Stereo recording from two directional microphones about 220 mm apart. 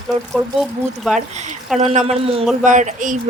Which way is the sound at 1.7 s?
30° right (ahead or behind).